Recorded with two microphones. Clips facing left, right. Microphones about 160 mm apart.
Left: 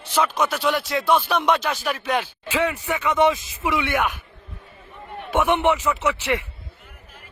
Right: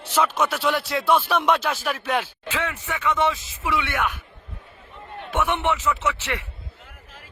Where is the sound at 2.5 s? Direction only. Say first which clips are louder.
Left 6 dB; 10° left (ahead or behind).